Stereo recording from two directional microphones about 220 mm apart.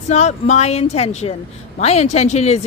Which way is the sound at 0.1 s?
30° left (ahead or behind).